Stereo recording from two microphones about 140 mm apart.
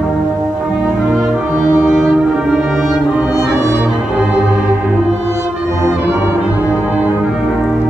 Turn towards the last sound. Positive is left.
turn(degrees=-10)  # may be behind; listen again after turning